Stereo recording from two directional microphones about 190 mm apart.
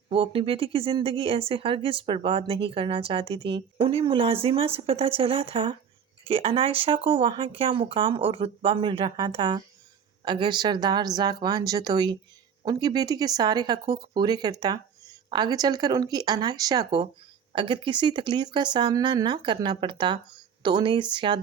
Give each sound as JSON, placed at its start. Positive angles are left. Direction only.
{"t": 0.1, "sound": "speech", "side_deg": -30}